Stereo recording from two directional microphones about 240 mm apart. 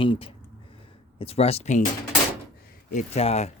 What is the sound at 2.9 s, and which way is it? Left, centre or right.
Speech, left.